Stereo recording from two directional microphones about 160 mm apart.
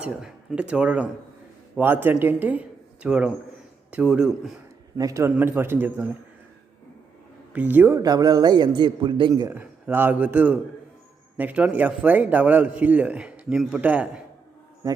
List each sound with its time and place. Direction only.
0.0 s speech: 5° right (ahead or behind)
4.9 s a man's voice: 20° right (ahead or behind)
7.5 s a man's voice: 10° right (ahead or behind); by 9.5 s 30° right (ahead or behind)
9.5 s a man's voice: 10° right (ahead or behind)
14.8 s speech: 20° right (ahead or behind)